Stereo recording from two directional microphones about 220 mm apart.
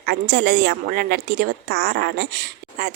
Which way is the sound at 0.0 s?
45° right (ahead or behind).